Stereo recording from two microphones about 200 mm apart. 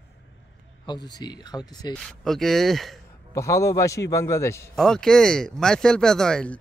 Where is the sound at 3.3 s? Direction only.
15° left (ahead or behind).